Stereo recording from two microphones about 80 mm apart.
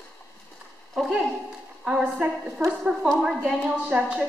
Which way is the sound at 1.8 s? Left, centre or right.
Centre.